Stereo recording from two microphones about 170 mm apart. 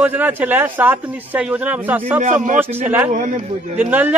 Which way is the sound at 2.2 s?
50° right (ahead or behind).